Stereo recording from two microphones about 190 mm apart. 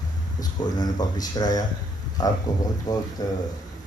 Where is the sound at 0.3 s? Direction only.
20° left (ahead or behind).